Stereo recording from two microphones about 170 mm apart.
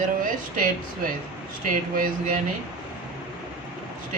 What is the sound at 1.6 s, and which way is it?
Speech, 55° right (ahead or behind).